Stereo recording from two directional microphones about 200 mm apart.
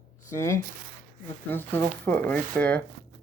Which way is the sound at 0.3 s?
15° left (ahead or behind).